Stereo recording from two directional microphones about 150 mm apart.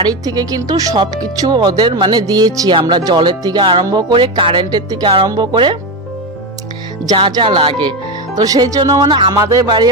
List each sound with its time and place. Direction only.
0.0 s speech: 25° right (ahead or behind)
7.0 s speech: 30° right (ahead or behind)